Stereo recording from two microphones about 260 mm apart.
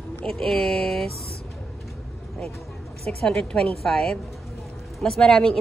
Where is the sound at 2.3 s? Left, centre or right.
Centre.